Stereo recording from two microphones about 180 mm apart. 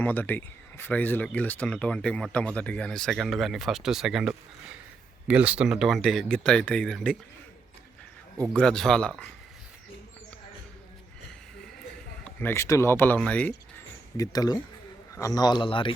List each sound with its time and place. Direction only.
0.0 s speech: 10° left (ahead or behind)
8.5 s speech: 5° left (ahead or behind)
12.2 s speech: 10° left (ahead or behind)
14.2 s a man's voice: 20° left (ahead or behind)